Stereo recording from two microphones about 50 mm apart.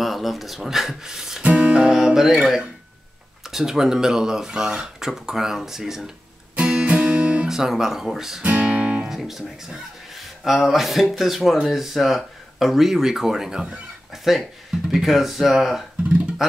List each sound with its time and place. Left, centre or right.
0.0 s speech: centre
1.4 s music: right; by 2.3 s centre
2.4 s speech: centre
6.5 s music: right
7.4 s speech: centre
8.5 s music: right
9.2 s speech: centre